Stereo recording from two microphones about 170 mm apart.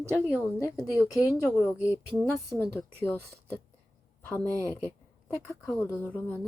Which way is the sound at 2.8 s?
10° left (ahead or behind).